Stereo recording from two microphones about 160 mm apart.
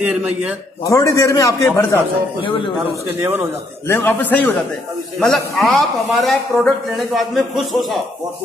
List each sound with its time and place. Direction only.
0.0 s a man's voice: 5° right (ahead or behind)
0.8 s a man's voice: 20° left (ahead or behind)
3.2 s a man's voice: 10° right (ahead or behind)
3.8 s a man's voice: 15° left (ahead or behind)